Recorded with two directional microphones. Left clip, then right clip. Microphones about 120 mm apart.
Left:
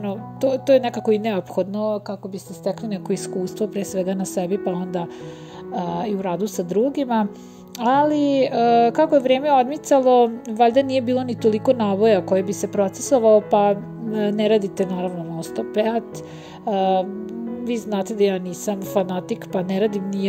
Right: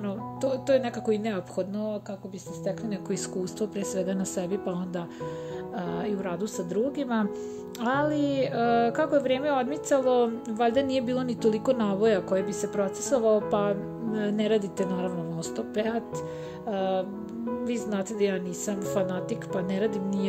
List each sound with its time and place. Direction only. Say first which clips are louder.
0.0 s speech: left 8 dB; 35° left (ahead or behind)
3.1 s a woman's voice: left 8 dB; 25° left (ahead or behind)